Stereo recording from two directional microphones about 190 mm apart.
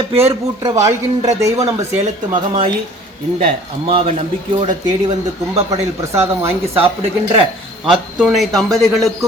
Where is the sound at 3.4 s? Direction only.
30° right (ahead or behind).